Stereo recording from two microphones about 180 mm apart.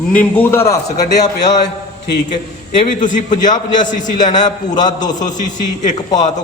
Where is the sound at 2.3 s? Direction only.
45° left (ahead or behind).